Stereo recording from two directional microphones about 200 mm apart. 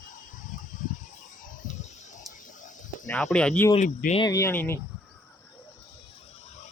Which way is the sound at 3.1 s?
5° left (ahead or behind).